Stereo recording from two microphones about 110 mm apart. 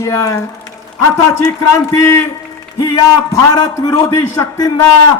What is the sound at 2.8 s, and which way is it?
A man's voice, 35° left (ahead or behind).